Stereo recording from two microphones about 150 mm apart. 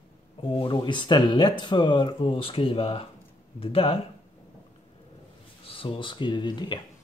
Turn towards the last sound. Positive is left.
turn(degrees=30)  # may be behind; listen again after turning